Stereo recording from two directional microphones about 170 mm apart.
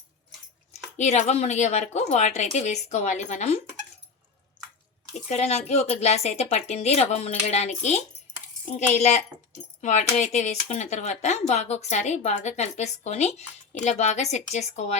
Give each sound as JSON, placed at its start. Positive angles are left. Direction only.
{"t": 0.7, "sound": "speech", "side_deg": 40}
{"t": 5.3, "sound": "a child's voice", "side_deg": 40}